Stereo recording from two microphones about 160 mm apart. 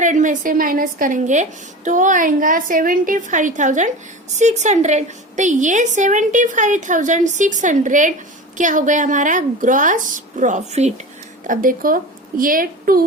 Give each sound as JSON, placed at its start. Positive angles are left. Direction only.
{"t": 0.0, "sound": "a woman's voice", "side_deg": -50}
{"t": 11.4, "sound": "a woman's voice", "side_deg": -60}